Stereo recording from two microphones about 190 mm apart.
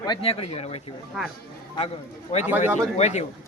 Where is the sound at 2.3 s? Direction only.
35° left (ahead or behind).